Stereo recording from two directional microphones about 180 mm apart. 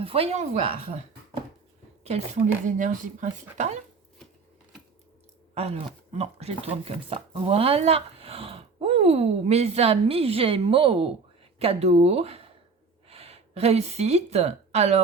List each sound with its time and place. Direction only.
0.0 s speech: 30° right (ahead or behind)
5.5 s a woman's voice: 35° right (ahead or behind)